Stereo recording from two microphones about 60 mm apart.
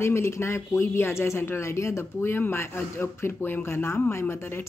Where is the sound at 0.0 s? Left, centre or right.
Left.